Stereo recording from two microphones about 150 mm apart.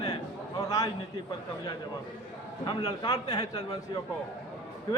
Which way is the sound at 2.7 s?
30° left (ahead or behind).